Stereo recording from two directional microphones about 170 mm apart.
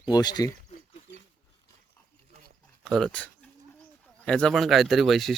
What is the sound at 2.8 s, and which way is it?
Speech, 5° left (ahead or behind).